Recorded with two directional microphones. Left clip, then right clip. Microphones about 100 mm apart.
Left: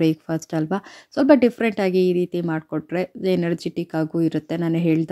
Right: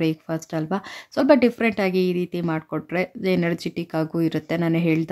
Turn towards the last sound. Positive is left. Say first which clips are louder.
# left 1 dB
turn(degrees=35)  # may be behind; listen again after turning